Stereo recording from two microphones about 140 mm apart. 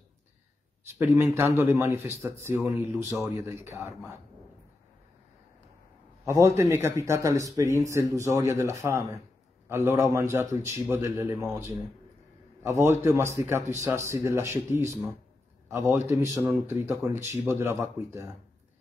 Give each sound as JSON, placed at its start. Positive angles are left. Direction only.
{"t": 0.8, "sound": "speech", "side_deg": -20}
{"t": 6.2, "sound": "a man's voice", "side_deg": -20}